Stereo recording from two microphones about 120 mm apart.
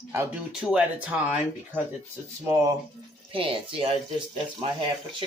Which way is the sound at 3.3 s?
50° right (ahead or behind).